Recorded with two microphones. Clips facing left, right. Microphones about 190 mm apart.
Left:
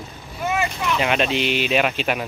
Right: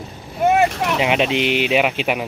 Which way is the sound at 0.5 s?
70° right (ahead or behind).